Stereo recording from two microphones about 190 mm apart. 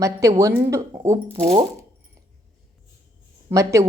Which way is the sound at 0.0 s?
15° right (ahead or behind).